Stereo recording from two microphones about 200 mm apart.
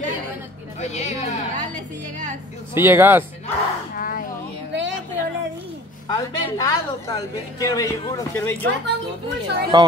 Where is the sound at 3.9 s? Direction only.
45° left (ahead or behind).